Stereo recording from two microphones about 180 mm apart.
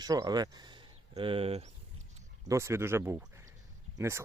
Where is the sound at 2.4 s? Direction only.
15° right (ahead or behind).